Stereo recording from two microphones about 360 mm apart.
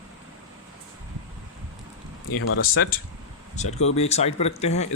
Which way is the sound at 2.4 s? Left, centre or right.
Left.